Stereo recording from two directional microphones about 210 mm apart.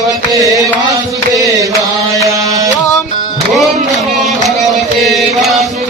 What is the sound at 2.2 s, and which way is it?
Music, 15° right (ahead or behind).